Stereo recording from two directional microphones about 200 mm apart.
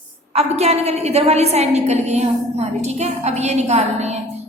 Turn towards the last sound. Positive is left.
turn(degrees=-35)  # may be behind; listen again after turning